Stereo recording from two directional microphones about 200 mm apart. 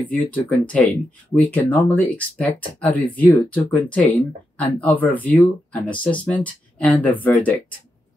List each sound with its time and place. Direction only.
0.0 s speech: 5° left (ahead or behind)